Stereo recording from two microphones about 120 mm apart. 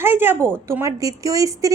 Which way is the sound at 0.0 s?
20° right (ahead or behind).